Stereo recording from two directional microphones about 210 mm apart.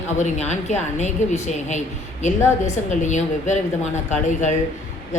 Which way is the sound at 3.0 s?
35° left (ahead or behind).